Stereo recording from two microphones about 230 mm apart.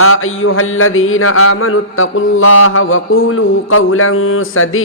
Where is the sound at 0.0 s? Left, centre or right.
Left.